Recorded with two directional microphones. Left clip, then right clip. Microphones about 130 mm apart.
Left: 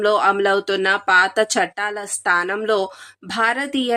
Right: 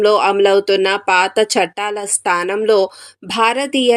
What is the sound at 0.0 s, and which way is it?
A woman's voice, 15° right (ahead or behind).